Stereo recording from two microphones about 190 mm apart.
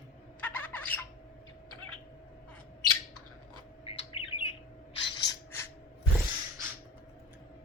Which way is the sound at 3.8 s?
30° left (ahead or behind).